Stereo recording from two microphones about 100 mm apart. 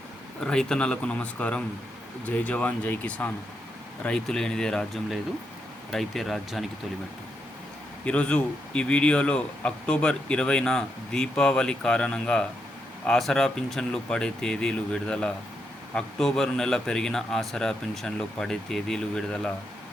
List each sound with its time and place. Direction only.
0.4 s a man's voice: 5° left (ahead or behind)
8.0 s a man's voice: 10° left (ahead or behind)